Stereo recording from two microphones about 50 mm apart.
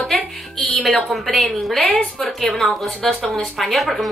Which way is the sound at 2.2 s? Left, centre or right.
Centre.